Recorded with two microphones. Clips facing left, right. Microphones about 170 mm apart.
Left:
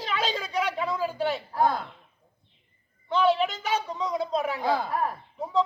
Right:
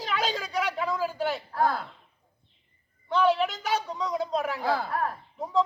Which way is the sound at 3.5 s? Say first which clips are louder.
Even; 10° right (ahead or behind).